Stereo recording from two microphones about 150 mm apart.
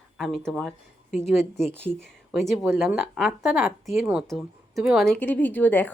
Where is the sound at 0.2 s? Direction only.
Centre (ahead or behind).